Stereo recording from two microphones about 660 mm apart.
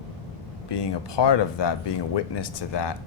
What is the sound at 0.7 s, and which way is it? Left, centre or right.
Speech, left.